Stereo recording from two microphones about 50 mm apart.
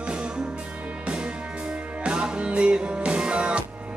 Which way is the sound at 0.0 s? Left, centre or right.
Right.